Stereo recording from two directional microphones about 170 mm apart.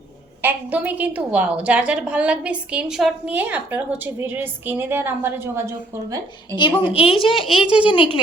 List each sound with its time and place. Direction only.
0.4 s a woman's voice: 10° right (ahead or behind)
6.6 s a woman's voice: 30° left (ahead or behind)